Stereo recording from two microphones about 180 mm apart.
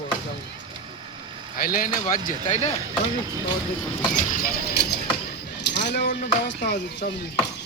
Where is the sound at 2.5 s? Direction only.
35° left (ahead or behind).